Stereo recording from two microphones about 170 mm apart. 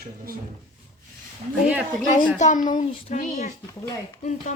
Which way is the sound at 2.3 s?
45° left (ahead or behind).